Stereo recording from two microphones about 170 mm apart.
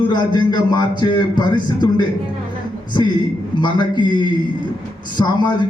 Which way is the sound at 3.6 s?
25° left (ahead or behind).